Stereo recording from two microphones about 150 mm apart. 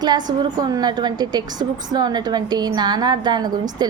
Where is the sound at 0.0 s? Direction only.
25° right (ahead or behind).